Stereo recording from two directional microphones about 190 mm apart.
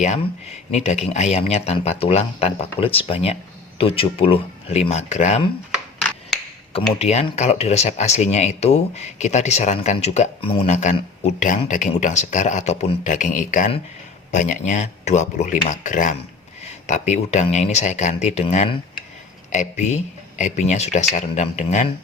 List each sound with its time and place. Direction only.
0.7 s speech: 35° left (ahead or behind)
7.0 s speech: 35° left (ahead or behind)